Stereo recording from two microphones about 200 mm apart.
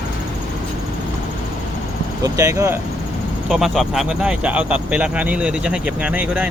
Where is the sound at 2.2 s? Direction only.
15° right (ahead or behind).